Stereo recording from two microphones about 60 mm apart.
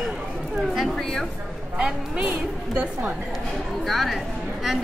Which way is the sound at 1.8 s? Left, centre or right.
Centre.